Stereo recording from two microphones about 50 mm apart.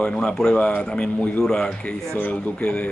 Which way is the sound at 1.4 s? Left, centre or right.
Centre.